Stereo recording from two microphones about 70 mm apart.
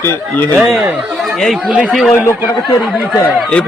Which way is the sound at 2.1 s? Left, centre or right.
Left.